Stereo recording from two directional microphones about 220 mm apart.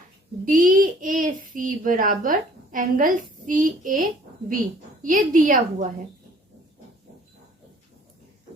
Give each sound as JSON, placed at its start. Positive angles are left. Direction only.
{"t": 0.4, "sound": "a woman's voice", "side_deg": -40}